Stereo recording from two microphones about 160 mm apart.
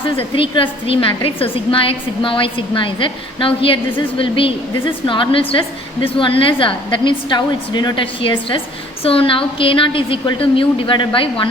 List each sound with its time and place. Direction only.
0.2 s a woman's voice: 35° left (ahead or behind)